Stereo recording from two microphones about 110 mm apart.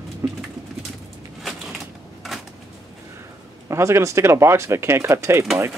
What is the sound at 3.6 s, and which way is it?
Speech, 25° right (ahead or behind).